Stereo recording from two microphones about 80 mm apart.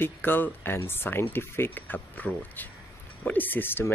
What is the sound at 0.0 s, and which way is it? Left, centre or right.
Speech, left.